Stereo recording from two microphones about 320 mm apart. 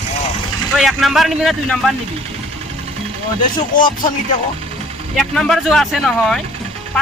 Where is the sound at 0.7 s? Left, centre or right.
Centre.